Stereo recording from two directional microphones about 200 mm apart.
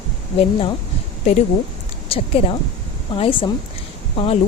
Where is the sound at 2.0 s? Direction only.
30° left (ahead or behind).